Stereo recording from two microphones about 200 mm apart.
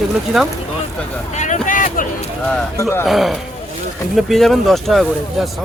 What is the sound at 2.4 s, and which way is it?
Speech, 10° left (ahead or behind).